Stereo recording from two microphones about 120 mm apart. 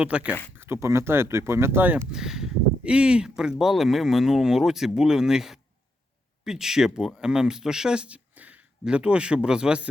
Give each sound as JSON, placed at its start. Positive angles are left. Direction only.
{"t": 0.0, "sound": "speech", "side_deg": -10}
{"t": 2.1, "sound": "speech", "side_deg": -5}